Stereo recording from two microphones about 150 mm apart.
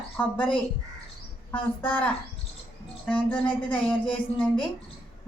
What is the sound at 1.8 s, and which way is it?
Speech, 10° left (ahead or behind).